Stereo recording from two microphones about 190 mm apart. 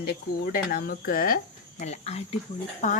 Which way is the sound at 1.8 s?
35° left (ahead or behind).